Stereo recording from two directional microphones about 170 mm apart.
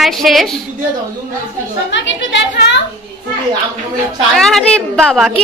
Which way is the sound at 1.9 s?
90° left.